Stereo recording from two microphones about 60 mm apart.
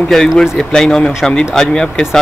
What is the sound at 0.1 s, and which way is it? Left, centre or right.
Speech, centre.